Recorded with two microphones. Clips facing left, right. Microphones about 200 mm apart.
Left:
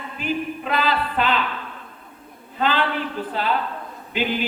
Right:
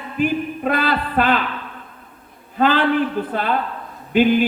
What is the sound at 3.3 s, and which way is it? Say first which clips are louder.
A man's voice: right 2 dB; 50° right (ahead or behind).